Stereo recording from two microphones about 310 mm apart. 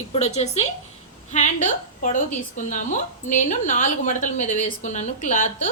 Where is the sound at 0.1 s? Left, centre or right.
Left.